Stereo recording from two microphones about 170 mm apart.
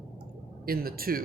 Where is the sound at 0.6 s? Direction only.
60° right (ahead or behind).